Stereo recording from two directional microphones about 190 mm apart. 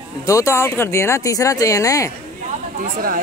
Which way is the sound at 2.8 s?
45° right (ahead or behind).